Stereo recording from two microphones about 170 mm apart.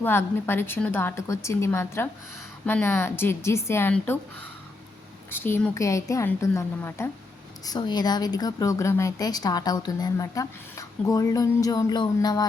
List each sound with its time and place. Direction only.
0.0 s a woman's voice: 15° left (ahead or behind)
5.3 s a woman's voice: 15° left (ahead or behind)